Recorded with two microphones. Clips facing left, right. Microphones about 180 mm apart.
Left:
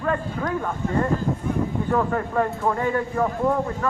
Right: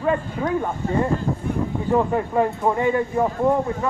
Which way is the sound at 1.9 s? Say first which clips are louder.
Right 5 dB; 15° right (ahead or behind).